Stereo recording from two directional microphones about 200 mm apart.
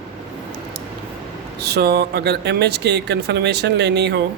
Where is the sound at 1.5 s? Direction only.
55° right (ahead or behind).